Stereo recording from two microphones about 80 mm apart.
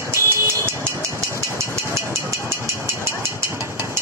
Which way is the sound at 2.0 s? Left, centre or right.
Right.